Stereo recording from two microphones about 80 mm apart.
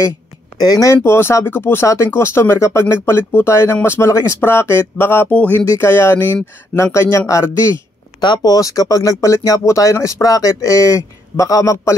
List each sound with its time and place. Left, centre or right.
0.6 s speech: left
0.9 s a sound: left
2.1 s speech: left
4.4 s a sound: left
5.7 s speech: left
8.2 s speech: left
8.5 s speech: left